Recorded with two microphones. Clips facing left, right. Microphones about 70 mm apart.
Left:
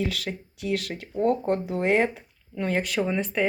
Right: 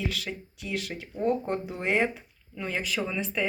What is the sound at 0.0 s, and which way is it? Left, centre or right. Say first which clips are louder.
Speech: left 4 dB; left.